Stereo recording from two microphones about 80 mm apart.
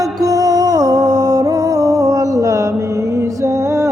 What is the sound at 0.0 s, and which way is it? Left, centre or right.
Music, right.